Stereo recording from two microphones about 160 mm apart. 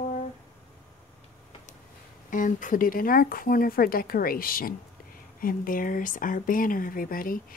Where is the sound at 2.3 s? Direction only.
55° left (ahead or behind).